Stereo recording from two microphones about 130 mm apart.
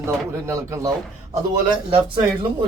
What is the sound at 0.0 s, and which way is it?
Speech, 20° right (ahead or behind).